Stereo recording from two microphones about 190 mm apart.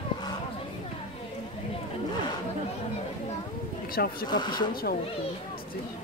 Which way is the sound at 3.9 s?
50° left (ahead or behind).